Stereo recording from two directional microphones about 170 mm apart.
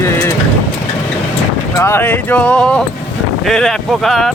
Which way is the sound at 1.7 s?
15° left (ahead or behind).